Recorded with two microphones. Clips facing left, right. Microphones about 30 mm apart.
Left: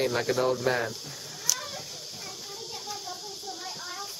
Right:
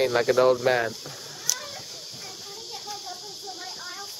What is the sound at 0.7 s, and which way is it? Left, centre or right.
Speech, right.